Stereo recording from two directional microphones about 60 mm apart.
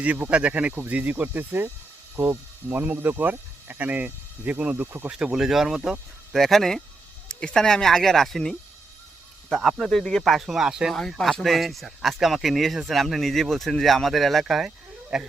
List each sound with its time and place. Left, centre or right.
0.3 s speech: centre
2.2 s speech: right
2.6 s speech: right
5.1 s speech: centre
6.4 s speech: centre
9.6 s speech: centre
11.2 s speech: centre